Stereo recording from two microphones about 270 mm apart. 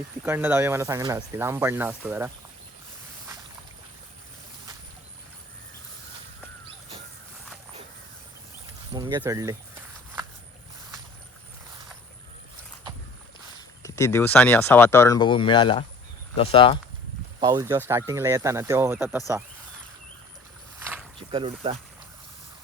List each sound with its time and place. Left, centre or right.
0.3 s speech: centre
8.9 s speech: centre
13.8 s speech: centre
17.4 s speech: centre
21.2 s speech: centre